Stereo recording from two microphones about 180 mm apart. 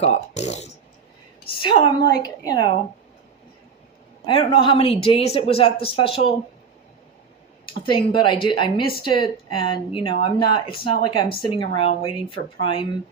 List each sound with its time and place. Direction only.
0.0 s a woman's voice: 40° left (ahead or behind); by 2.6 s 20° left (ahead or behind)
4.3 s speech: 30° left (ahead or behind)
7.9 s a woman's voice: 30° left (ahead or behind)